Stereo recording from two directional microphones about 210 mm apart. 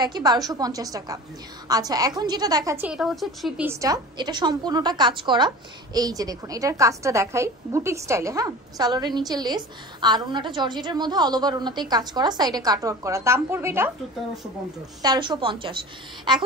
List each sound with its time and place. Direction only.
0.0 s a woman's voice: 20° right (ahead or behind); by 3.6 s centre (ahead or behind)
3.6 s a woman's voice: 15° right (ahead or behind)
15.0 s a woman's voice: 20° right (ahead or behind)